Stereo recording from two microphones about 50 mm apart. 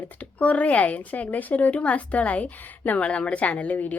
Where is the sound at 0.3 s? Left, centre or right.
Left.